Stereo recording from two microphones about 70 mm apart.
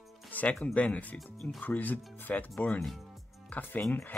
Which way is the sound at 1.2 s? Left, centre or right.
Centre.